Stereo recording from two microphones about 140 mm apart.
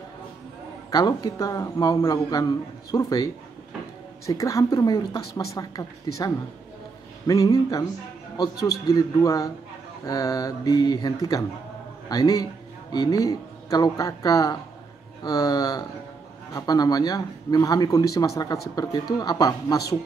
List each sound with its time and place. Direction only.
0.8 s speech: 30° left (ahead or behind)
4.3 s speech: 25° left (ahead or behind)